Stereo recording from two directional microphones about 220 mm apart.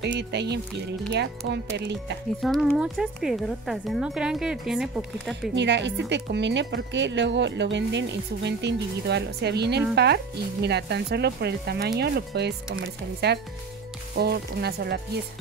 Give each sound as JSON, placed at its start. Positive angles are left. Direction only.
{"t": 0.2, "sound": "speech", "side_deg": -50}
{"t": 2.4, "sound": "speech", "side_deg": 0}
{"t": 5.5, "sound": "speech", "side_deg": -55}